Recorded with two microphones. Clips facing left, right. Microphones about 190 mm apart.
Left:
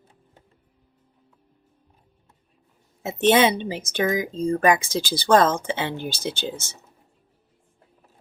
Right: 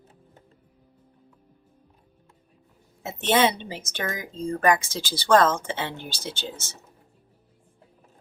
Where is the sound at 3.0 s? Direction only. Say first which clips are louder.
Left 4 dB; 15° left (ahead or behind).